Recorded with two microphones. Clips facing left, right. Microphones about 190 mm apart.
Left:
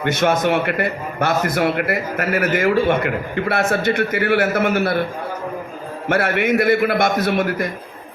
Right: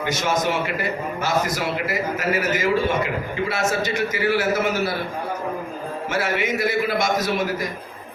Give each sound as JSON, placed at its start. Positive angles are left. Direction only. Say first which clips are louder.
{"t": 0.0, "sound": "a man's voice", "louder": "left 5 dB", "side_deg": 60}
{"t": 6.1, "sound": "a man's voice", "louder": "left 6 dB", "side_deg": 60}